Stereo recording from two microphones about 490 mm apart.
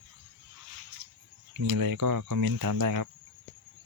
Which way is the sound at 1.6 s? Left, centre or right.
Right.